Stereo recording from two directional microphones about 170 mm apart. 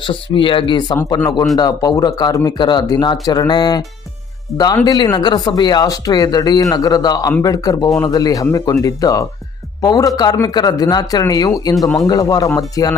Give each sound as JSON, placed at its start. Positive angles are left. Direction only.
{"t": 0.0, "sound": "speech", "side_deg": 30}